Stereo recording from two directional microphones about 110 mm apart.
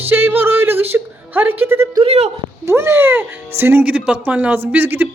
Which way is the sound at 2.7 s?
25° right (ahead or behind).